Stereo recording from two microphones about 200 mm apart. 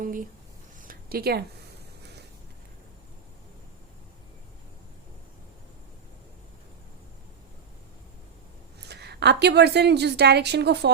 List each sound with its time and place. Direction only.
0.0 s speech: 40° right (ahead or behind)
0.8 s a sound: 45° right (ahead or behind)
8.8 s a woman's voice: 55° right (ahead or behind)